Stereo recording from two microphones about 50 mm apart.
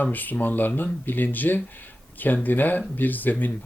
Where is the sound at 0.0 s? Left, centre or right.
Left.